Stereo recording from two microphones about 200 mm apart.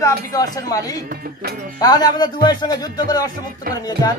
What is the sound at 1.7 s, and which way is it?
Speech, 20° left (ahead or behind).